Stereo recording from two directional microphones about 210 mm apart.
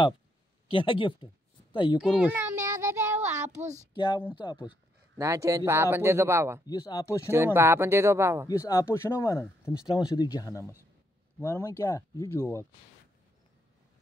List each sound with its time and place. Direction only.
0.7 s speech: 25° left (ahead or behind)
2.0 s child singing: 5° right (ahead or behind)
3.4 s child singing: 35° right (ahead or behind)
3.9 s speech: 20° left (ahead or behind)
5.1 s speech: 15° right (ahead or behind)
6.6 s speech: 15° left (ahead or behind)
7.2 s speech: 10° right (ahead or behind)
8.5 s speech: 15° left (ahead or behind)